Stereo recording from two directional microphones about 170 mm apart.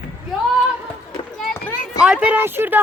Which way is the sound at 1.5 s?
10° left (ahead or behind).